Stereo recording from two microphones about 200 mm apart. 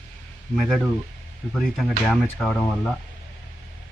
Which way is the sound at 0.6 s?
Centre (ahead or behind).